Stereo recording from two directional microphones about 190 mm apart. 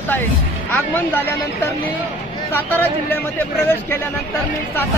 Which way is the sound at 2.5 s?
10° left (ahead or behind).